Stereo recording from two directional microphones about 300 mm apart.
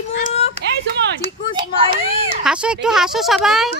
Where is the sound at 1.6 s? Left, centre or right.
Centre.